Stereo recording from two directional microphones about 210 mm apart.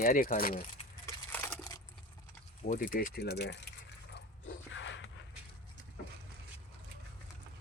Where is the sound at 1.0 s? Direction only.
10° left (ahead or behind).